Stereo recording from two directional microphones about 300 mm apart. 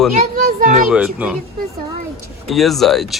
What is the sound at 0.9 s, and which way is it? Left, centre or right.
Speech, centre.